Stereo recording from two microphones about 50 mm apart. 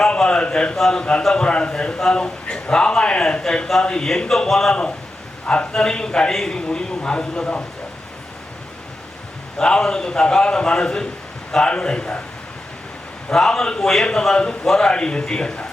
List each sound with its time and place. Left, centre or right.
0.0 s a man's voice: centre
9.6 s a man's voice: centre
13.3 s a man's voice: centre